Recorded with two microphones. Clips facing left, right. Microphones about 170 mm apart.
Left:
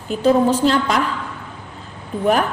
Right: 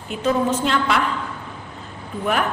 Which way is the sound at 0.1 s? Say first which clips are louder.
Left 5 dB; 35° left (ahead or behind).